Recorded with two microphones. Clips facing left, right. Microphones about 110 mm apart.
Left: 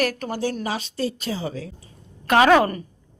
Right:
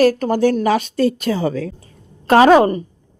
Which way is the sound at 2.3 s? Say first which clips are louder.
Right 6 dB; 35° right (ahead or behind).